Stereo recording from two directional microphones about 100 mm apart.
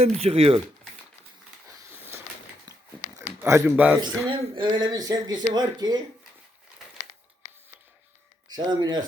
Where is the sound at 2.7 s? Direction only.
40° right (ahead or behind).